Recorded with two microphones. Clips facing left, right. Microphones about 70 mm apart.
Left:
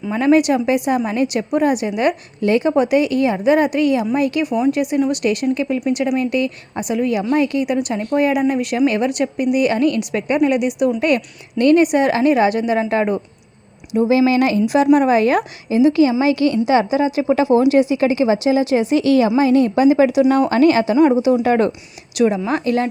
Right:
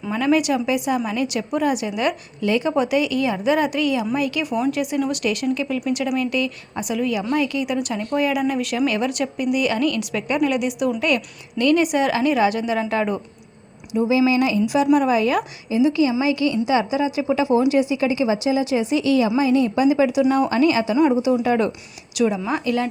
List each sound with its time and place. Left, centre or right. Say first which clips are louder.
0.1 s a woman's voice: left 5 dB; left
13.9 s a woman's voice: left 3 dB; left
20.9 s a woman's voice: left 4 dB; left
21.4 s a woman's voice: left 4 dB; left